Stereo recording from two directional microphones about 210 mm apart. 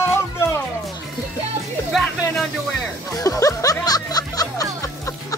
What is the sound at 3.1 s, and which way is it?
Music, 15° left (ahead or behind).